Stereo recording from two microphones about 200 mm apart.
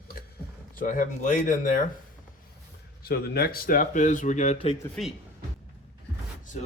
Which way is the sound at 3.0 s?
50° left (ahead or behind).